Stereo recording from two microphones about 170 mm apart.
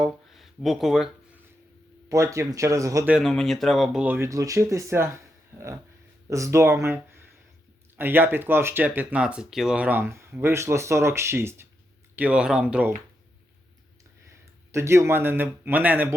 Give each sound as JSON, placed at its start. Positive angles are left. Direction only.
{"t": 0.0, "sound": "speech", "side_deg": 0}
{"t": 2.0, "sound": "speech", "side_deg": -20}
{"t": 3.1, "sound": "speech", "side_deg": 0}
{"t": 14.7, "sound": "speech", "side_deg": -15}